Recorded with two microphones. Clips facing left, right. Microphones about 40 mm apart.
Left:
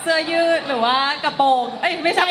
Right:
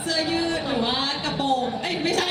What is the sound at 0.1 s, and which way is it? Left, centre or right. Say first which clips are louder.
A woman's voice: left 7 dB; left.